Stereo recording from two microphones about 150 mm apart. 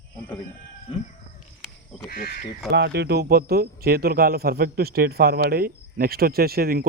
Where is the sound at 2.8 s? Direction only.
90° right.